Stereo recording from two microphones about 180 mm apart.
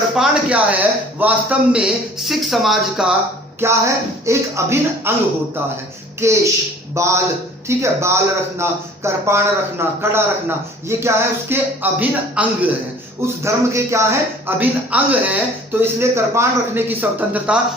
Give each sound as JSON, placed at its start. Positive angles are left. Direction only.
{"t": 0.2, "sound": "a man's voice", "side_deg": -10}
{"t": 3.6, "sound": "a man's voice", "side_deg": -15}
{"t": 6.1, "sound": "a man's voice", "side_deg": -15}